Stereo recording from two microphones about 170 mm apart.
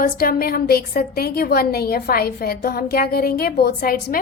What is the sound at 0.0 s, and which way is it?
A woman's voice, 60° left (ahead or behind).